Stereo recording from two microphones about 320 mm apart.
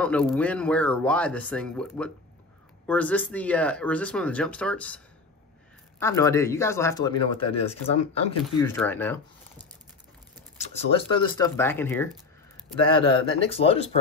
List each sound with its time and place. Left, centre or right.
0.0 s speech: centre
8.6 s speech: centre
10.7 s speech: centre
12.9 s speech: centre